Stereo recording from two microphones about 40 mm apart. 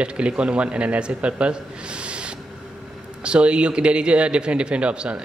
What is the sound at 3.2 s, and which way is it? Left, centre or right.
Speech, right.